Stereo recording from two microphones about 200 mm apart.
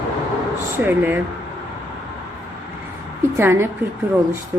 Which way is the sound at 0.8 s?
10° right (ahead or behind).